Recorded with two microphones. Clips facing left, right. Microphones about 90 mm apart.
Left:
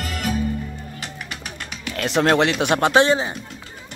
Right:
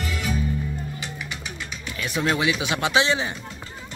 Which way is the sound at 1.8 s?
80° left.